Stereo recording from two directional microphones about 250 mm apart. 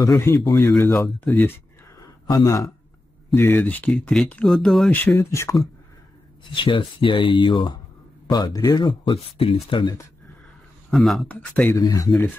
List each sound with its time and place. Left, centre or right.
0.0 s speech: centre
2.0 s a sound: centre
3.3 s speech: centre
10.9 s speech: centre